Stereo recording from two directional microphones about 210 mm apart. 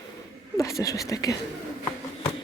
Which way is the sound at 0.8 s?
15° left (ahead or behind).